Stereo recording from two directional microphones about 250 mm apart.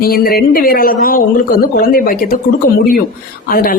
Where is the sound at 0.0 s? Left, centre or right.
Left.